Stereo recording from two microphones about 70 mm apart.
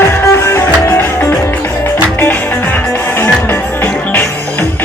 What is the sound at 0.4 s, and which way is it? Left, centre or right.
Music, left.